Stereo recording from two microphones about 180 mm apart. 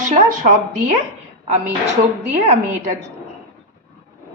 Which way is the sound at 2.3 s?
40° right (ahead or behind).